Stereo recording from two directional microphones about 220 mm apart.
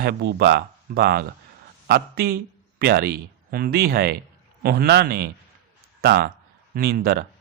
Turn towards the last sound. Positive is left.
turn(degrees=-45)  # may be behind; listen again after turning